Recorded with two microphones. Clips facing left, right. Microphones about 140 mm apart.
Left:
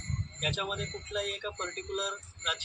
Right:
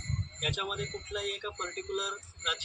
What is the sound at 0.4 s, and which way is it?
Speech, 25° left (ahead or behind).